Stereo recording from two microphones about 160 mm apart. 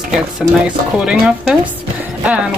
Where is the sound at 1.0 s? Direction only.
5° right (ahead or behind).